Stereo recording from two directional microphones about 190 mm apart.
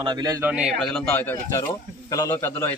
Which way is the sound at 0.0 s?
20° right (ahead or behind).